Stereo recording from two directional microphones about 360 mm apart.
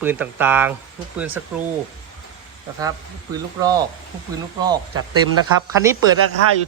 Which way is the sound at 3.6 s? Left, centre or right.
Centre.